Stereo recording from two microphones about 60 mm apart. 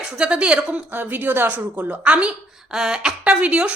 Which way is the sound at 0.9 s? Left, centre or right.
Right.